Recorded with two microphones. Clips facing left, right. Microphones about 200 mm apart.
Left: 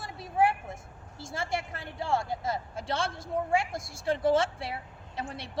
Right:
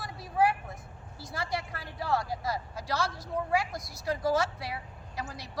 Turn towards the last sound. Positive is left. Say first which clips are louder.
# left 2 dB
turn(degrees=25)  # may be behind; listen again after turning